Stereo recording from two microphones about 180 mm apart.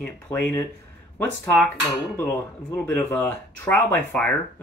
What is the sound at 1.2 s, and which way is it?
Speech, 10° left (ahead or behind).